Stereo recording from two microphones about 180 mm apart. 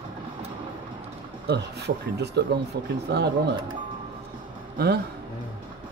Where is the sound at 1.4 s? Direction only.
65° right (ahead or behind).